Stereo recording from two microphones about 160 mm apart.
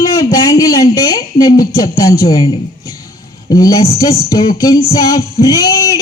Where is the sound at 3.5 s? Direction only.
20° left (ahead or behind).